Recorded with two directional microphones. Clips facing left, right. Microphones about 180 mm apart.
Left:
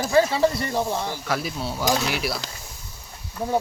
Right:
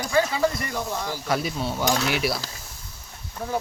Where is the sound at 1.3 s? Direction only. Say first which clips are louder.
Right 4 dB; centre (ahead or behind).